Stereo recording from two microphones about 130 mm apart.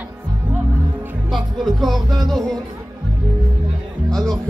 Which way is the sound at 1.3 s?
Centre (ahead or behind).